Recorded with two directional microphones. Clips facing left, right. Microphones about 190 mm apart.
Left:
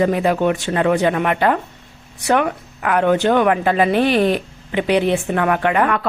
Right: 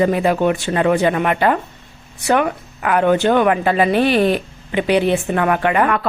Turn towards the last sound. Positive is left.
turn(degrees=-5)  # may be behind; listen again after turning